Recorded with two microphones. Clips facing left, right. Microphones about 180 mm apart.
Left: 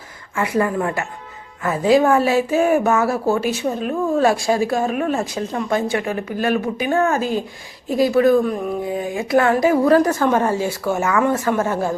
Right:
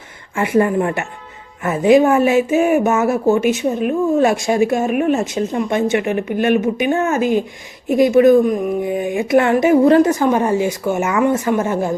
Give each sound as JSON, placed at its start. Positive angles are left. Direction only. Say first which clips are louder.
{"t": 0.3, "sound": "speech", "louder": "right 4 dB", "side_deg": -25}